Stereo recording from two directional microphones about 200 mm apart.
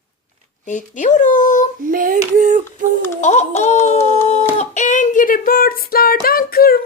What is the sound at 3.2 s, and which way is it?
Speech, 35° left (ahead or behind).